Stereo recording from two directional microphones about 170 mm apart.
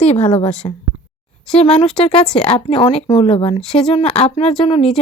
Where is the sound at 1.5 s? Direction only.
35° left (ahead or behind).